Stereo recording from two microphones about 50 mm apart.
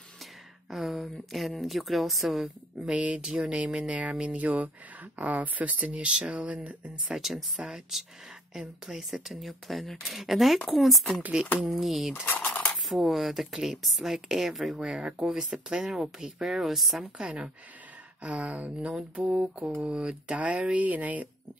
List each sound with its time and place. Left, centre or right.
0.7 s speech: centre
2.4 s speech: right
7.2 s speech: centre
14.8 s speech: centre
17.0 s speech: right